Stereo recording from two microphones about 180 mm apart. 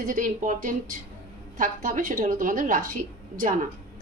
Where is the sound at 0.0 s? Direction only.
45° right (ahead or behind).